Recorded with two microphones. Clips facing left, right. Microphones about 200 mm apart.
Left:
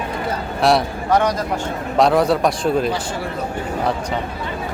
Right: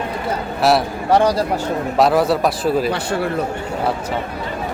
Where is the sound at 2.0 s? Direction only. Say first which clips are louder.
Even; 5° right (ahead or behind).